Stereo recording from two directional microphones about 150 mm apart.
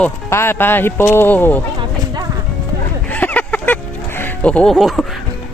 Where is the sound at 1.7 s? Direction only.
25° right (ahead or behind).